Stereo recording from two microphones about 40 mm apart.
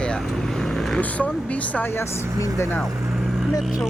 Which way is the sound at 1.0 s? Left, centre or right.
Left.